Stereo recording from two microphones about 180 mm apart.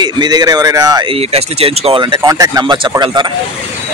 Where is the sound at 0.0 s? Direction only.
25° right (ahead or behind).